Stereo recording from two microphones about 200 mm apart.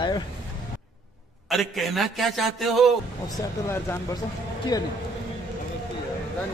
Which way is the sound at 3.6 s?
15° left (ahead or behind).